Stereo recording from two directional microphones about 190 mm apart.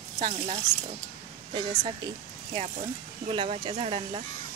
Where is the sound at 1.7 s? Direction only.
35° right (ahead or behind).